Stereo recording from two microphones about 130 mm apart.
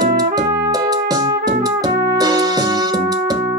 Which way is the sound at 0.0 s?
30° right (ahead or behind).